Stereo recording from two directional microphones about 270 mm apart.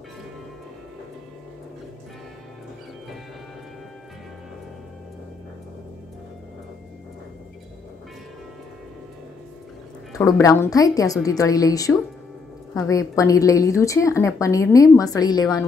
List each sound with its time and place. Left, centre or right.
10.1 s a woman's voice: centre